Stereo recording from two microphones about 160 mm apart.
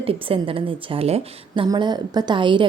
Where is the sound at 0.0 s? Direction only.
35° right (ahead or behind).